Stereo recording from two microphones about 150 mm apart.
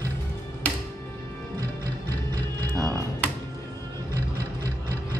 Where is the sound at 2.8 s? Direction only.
5° left (ahead or behind).